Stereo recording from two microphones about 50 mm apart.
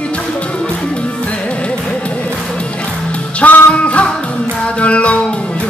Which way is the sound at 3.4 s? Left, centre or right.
Left.